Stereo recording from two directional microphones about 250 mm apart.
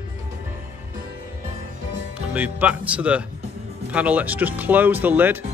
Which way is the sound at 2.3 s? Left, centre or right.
Centre.